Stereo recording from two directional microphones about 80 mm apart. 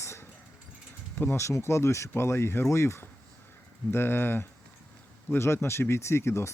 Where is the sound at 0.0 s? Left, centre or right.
Left.